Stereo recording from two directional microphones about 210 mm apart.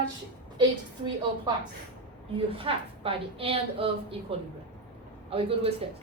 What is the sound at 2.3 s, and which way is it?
A woman's voice, 25° right (ahead or behind).